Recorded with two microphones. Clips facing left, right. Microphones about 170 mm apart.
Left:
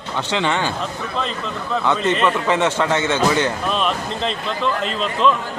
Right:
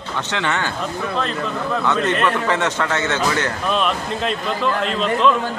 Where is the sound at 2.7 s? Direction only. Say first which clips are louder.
Left 3 dB; 10° left (ahead or behind).